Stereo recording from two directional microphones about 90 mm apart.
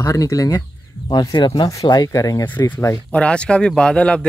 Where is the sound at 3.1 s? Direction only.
10° left (ahead or behind).